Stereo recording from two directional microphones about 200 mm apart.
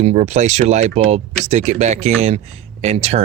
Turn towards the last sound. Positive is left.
turn(degrees=-30)  # may be behind; listen again after turning